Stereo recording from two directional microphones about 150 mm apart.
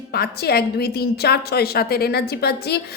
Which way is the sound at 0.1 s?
90° left.